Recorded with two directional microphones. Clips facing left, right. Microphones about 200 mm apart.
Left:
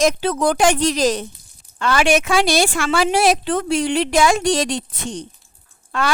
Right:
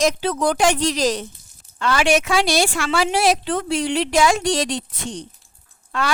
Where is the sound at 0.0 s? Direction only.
50° left (ahead or behind).